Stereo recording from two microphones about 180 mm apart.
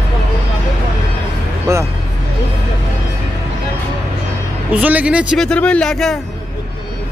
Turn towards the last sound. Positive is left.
turn(degrees=0)  # may be behind; listen again after turning